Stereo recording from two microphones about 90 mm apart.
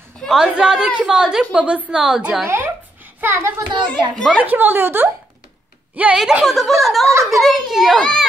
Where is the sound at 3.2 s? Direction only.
25° right (ahead or behind).